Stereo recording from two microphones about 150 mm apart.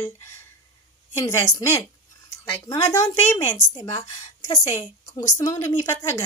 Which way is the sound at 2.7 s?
20° left (ahead or behind).